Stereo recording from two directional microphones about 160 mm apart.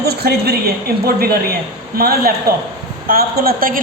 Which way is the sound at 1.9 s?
70° right (ahead or behind).